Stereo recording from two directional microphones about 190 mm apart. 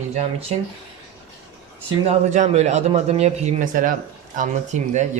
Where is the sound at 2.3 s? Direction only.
35° right (ahead or behind).